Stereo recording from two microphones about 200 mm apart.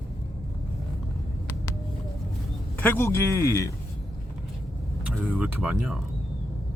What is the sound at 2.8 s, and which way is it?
Speech, 10° left (ahead or behind).